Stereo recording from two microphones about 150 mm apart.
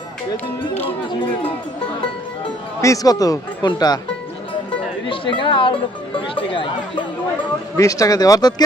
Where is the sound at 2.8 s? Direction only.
25° left (ahead or behind).